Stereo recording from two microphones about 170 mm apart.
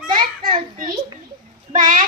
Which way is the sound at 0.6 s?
55° right (ahead or behind).